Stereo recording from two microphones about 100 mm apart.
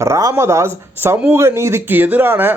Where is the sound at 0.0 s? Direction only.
30° right (ahead or behind).